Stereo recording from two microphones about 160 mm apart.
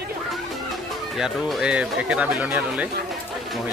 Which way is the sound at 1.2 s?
5° right (ahead or behind).